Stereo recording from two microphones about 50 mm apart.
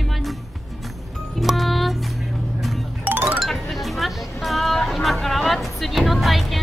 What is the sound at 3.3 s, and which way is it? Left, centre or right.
Music, centre.